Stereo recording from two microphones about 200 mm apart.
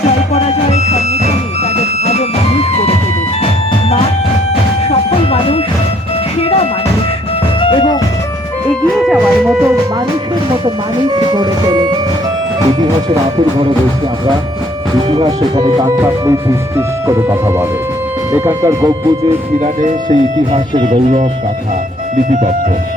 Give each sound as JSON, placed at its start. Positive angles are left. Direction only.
{"t": 0.3, "sound": "music", "side_deg": 35}
{"t": 9.0, "sound": "music", "side_deg": 0}
{"t": 11.0, "sound": "speech", "side_deg": -20}
{"t": 15.1, "sound": "speech", "side_deg": -20}
{"t": 19.5, "sound": "speech", "side_deg": -35}
{"t": 20.1, "sound": "speech", "side_deg": -25}
{"t": 22.1, "sound": "music", "side_deg": -45}